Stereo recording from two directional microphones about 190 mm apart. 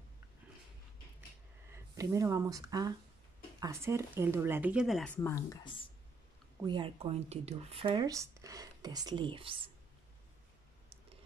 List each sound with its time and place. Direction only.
1.7 s speech: 15° right (ahead or behind); by 5.9 s 25° left (ahead or behind)
6.6 s speech: 25° right (ahead or behind)